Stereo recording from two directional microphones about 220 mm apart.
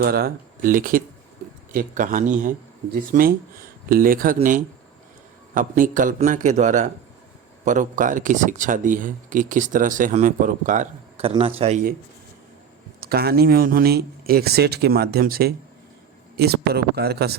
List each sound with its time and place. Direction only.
0.0 s speech: 45° right (ahead or behind); by 11.8 s 25° right (ahead or behind)
13.0 s speech: 45° right (ahead or behind)